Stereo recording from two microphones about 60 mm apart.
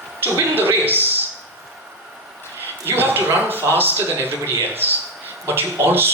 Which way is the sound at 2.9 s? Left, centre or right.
Right.